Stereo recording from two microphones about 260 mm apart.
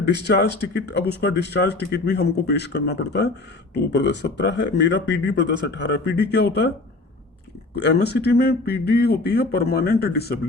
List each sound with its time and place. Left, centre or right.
0.1 s speech: left
7.9 s speech: left